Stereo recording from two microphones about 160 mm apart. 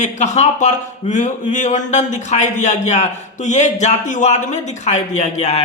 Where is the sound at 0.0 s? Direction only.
45° left (ahead or behind).